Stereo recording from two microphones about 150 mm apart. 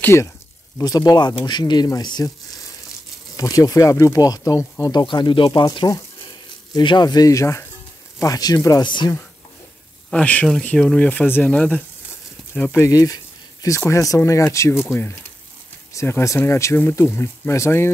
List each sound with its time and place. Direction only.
0.0 s speech: 20° left (ahead or behind)
3.3 s speech: 25° left (ahead or behind)
5.0 s speech: 30° left (ahead or behind)
10.1 s speech: 10° left (ahead or behind)
15.9 s speech: 20° left (ahead or behind)